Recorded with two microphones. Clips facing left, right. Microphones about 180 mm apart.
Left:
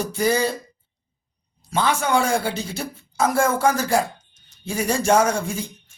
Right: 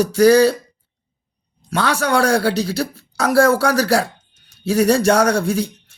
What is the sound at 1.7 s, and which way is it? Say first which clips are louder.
Speech: right 2 dB; 75° right (ahead or behind).